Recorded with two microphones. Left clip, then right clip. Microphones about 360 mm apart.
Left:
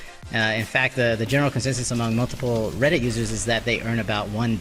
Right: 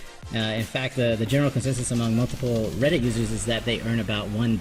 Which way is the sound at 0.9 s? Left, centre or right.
Left.